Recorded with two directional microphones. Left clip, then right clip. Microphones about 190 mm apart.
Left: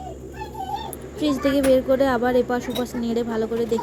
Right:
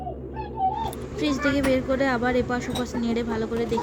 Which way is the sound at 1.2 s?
5° left (ahead or behind).